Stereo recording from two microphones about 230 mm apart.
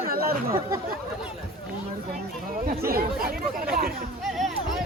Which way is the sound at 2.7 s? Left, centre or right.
Right.